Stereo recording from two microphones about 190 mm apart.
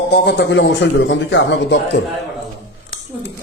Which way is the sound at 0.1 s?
60° left (ahead or behind).